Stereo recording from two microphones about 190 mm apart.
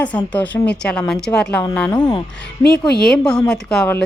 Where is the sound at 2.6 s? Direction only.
55° left (ahead or behind).